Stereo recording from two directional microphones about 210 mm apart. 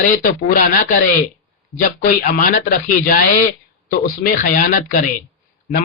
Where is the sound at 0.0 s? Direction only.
40° left (ahead or behind).